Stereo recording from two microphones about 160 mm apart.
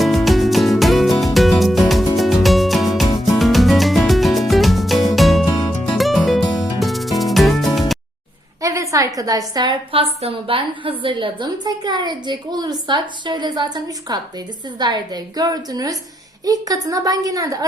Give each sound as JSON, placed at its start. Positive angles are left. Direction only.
{"t": 0.0, "sound": "music", "side_deg": 0}
{"t": 5.5, "sound": "music", "side_deg": 20}
{"t": 5.9, "sound": "music", "side_deg": 0}
{"t": 8.6, "sound": "a woman's voice", "side_deg": -20}